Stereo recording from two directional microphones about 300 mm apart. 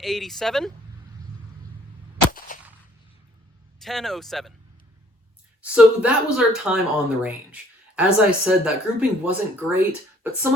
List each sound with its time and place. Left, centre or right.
0.0 s speech: centre
2.5 s a sound: left
3.8 s speech: centre
5.6 s speech: centre